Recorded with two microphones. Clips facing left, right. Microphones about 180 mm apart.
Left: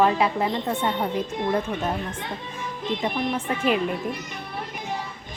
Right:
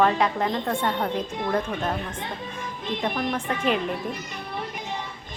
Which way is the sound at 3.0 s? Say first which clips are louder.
Right 1 dB; 5° left (ahead or behind).